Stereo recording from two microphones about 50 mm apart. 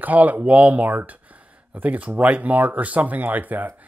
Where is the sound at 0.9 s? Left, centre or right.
Right.